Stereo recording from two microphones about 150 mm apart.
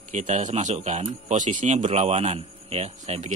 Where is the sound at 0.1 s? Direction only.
50° right (ahead or behind).